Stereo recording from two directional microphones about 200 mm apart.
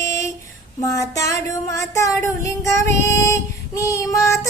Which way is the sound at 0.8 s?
15° left (ahead or behind).